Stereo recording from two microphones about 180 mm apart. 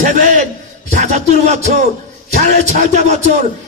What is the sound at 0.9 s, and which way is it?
Music, 40° right (ahead or behind).